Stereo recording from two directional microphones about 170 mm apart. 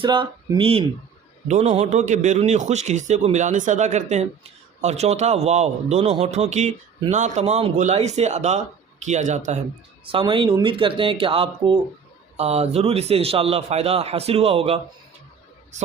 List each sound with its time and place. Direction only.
0.0 s a man's voice: 30° right (ahead or behind)
10.1 s a man's voice: 30° right (ahead or behind)